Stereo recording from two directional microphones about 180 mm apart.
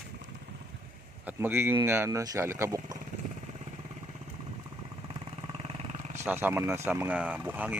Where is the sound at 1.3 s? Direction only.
10° right (ahead or behind).